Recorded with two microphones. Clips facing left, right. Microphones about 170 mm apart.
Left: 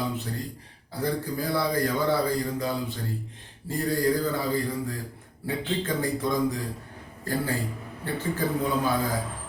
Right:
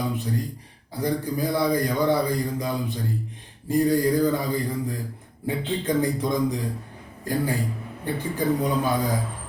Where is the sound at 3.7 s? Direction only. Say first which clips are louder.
Right 5 dB; 15° right (ahead or behind).